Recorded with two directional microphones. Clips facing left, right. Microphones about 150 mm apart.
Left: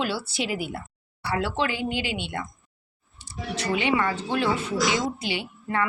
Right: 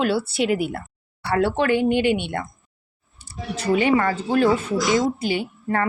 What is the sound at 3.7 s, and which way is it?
A woman's voice, 45° right (ahead or behind).